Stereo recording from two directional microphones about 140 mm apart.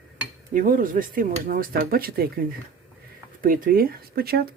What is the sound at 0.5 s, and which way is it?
Speech, 75° right (ahead or behind).